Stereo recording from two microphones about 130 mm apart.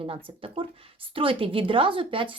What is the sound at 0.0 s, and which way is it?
A woman's voice, 45° right (ahead or behind).